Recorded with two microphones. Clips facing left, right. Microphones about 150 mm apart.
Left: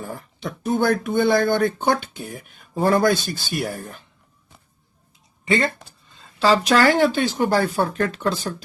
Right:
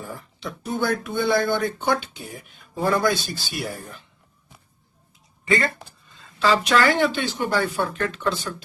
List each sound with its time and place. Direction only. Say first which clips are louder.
0.2 s speech: left 3 dB; 50° left (ahead or behind)
6.4 s speech: left 3 dB; 35° left (ahead or behind)